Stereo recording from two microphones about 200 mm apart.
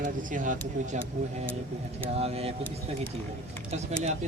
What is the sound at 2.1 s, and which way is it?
Speech, 30° right (ahead or behind).